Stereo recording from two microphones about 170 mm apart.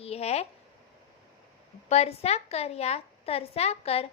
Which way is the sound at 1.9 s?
35° left (ahead or behind).